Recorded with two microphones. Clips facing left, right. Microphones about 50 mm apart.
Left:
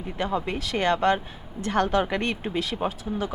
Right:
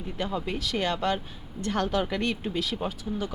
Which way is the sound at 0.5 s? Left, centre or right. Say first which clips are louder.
Left 2 dB; centre.